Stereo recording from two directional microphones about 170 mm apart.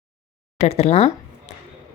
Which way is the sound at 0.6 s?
40° left (ahead or behind).